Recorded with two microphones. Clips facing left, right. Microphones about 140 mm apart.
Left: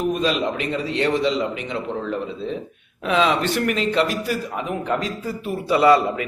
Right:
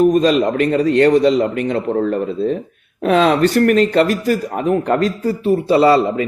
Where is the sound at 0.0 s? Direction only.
40° right (ahead or behind).